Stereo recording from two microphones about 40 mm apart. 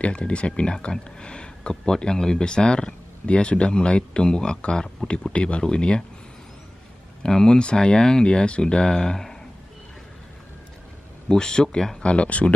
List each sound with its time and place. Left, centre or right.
0.0 s speech: left
7.2 s speech: centre
11.2 s speech: centre
12.0 s speech: left